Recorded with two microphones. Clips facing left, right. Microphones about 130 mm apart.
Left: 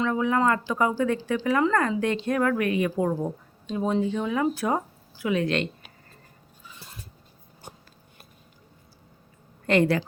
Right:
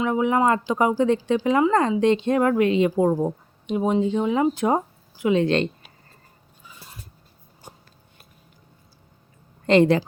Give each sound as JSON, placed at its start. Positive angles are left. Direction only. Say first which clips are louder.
{"t": 0.0, "sound": "speech", "louder": "right 3 dB", "side_deg": -20}
{"t": 9.6, "sound": "speech", "louder": "right 5 dB", "side_deg": -20}